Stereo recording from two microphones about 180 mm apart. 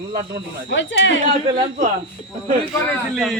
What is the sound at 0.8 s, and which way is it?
Speech, 90° left.